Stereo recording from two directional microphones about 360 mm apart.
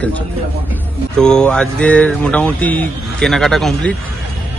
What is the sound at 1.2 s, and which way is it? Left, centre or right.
Speech, centre.